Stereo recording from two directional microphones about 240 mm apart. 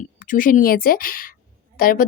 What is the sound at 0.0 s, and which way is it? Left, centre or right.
A woman's voice, left.